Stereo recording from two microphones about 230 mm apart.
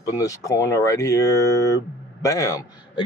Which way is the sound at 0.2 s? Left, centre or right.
Centre.